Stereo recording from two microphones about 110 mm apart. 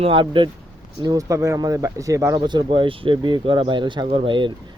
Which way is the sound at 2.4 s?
45° right (ahead or behind).